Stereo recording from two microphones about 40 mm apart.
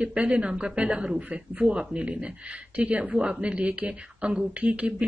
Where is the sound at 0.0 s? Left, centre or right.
Right.